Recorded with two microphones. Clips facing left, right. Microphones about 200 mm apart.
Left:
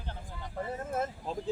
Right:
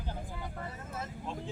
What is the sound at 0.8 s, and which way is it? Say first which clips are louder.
Speech: left 11 dB; 50° left (ahead or behind).